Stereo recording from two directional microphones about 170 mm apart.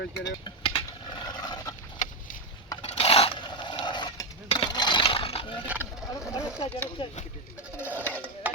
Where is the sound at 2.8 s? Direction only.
35° left (ahead or behind).